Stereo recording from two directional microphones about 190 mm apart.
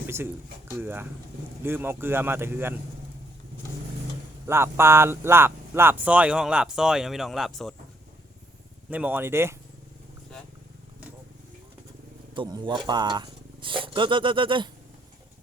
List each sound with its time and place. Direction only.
0.7 s speech: 10° right (ahead or behind)
4.4 s speech: 15° right (ahead or behind)
8.9 s speech: 10° right (ahead or behind)
12.3 s speech: 25° right (ahead or behind)